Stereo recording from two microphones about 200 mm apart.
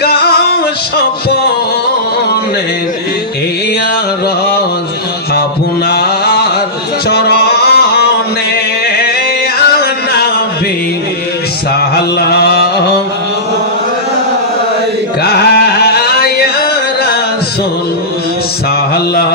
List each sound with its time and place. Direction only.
0.0 s music: 50° left (ahead or behind)
5.9 s mantra: 55° left (ahead or behind)
7.1 s music: 55° left (ahead or behind)
8.8 s singing: 55° left (ahead or behind)
9.6 s music: 55° left (ahead or behind)
11.9 s mantra: 55° left (ahead or behind)
15.2 s a sound: 55° left (ahead or behind)